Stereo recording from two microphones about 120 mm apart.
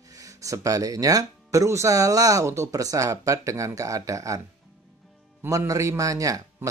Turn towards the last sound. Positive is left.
turn(degrees=-30)  # may be behind; listen again after turning